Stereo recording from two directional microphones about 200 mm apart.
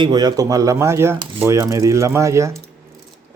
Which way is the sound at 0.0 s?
20° right (ahead or behind).